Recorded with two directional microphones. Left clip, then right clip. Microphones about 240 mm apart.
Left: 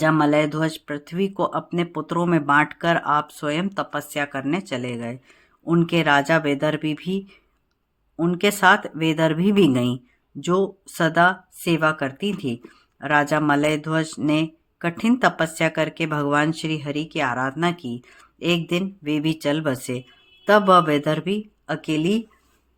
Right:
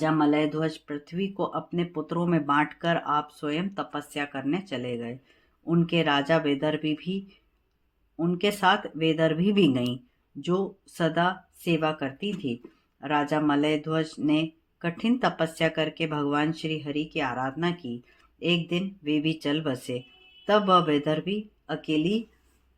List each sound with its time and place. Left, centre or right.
0.0 s speech: left